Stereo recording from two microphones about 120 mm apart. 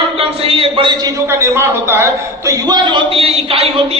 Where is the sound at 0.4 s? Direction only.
55° right (ahead or behind).